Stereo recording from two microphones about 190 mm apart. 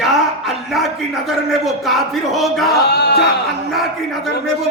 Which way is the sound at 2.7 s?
60° left (ahead or behind).